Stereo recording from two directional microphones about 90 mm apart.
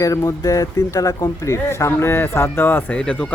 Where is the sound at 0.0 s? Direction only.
40° left (ahead or behind).